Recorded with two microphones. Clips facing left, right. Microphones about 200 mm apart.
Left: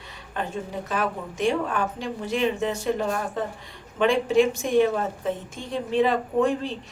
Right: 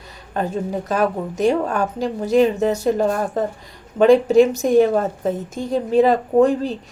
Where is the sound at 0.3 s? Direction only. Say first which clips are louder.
Right 7 dB; 40° right (ahead or behind).